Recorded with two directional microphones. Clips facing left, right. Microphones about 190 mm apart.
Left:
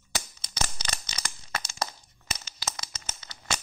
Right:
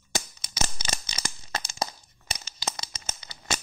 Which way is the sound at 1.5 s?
25° right (ahead or behind).